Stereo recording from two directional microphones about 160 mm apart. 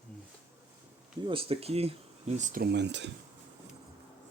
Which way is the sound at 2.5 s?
80° right.